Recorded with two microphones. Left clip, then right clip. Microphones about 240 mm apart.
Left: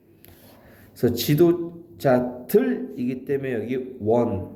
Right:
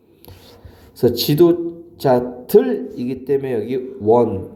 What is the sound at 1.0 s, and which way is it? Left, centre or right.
A man's voice, centre.